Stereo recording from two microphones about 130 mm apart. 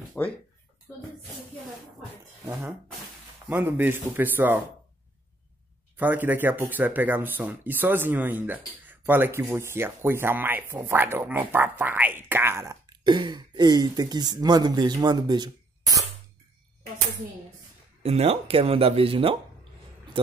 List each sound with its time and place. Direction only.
0.2 s speech: 10° left (ahead or behind)
3.4 s speech: 15° right (ahead or behind)
5.9 s speech: 15° right (ahead or behind)
12.9 s speech: 35° right (ahead or behind)
18.0 s speech: 50° right (ahead or behind)